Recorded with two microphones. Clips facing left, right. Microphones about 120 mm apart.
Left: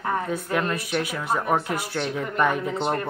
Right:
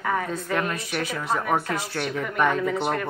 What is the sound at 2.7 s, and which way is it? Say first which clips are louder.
Speech: even; 20° left (ahead or behind).